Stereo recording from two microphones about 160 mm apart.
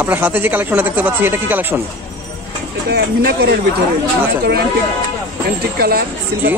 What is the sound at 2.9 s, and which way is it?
Speech, 90° right.